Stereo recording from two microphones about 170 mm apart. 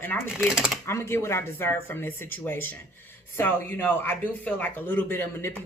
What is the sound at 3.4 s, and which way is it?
Speech, 10° left (ahead or behind).